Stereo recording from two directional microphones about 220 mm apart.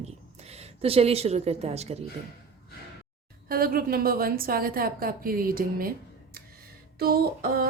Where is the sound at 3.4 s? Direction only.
40° right (ahead or behind).